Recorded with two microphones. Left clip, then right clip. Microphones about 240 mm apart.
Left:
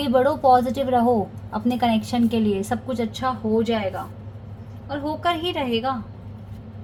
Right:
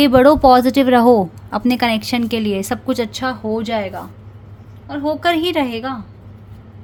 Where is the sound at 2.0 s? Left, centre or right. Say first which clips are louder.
Right 3 dB; right.